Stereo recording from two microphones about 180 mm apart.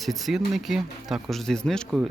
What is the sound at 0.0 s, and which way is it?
Speech, centre (ahead or behind).